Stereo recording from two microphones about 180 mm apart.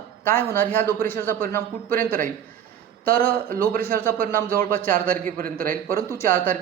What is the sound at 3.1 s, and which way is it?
A man's voice, 55° right (ahead or behind).